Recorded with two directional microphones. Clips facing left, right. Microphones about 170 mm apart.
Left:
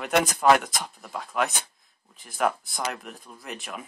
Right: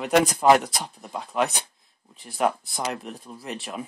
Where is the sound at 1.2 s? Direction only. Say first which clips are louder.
Right 2 dB; 30° right (ahead or behind).